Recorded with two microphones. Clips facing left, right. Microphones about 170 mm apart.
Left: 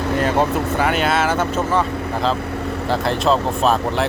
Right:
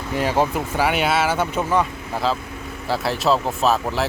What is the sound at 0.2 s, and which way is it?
Speech, 10° right (ahead or behind).